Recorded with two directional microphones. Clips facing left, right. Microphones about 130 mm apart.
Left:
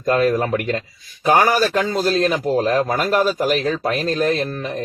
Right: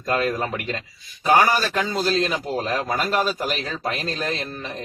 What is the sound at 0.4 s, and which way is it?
A man's voice, 45° left (ahead or behind).